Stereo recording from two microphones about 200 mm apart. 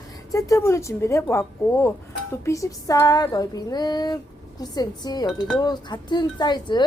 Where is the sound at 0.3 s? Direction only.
15° left (ahead or behind).